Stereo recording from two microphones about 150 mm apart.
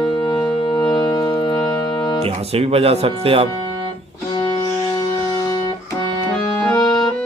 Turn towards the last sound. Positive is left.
turn(degrees=25)  # may be behind; listen again after turning